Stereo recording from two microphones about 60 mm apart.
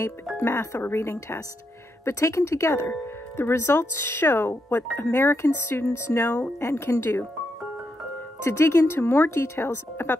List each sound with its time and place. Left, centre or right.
0.4 s speech: left
8.5 s speech: left